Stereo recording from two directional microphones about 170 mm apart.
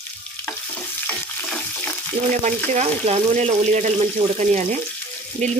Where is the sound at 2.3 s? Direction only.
45° right (ahead or behind).